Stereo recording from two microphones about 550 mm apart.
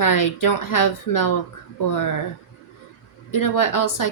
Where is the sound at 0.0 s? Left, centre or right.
Left.